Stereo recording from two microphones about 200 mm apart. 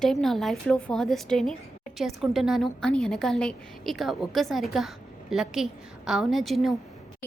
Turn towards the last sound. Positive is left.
turn(degrees=0)  # may be behind; listen again after turning